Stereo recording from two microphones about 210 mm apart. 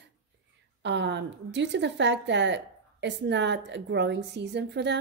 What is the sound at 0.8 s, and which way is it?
A woman's voice, 55° right (ahead or behind).